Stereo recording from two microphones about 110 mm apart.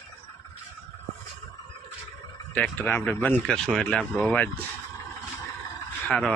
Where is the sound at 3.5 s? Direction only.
5° left (ahead or behind).